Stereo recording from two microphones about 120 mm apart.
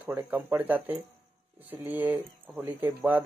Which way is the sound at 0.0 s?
15° right (ahead or behind).